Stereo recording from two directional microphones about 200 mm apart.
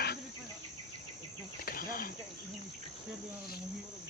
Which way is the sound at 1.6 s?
45° left (ahead or behind).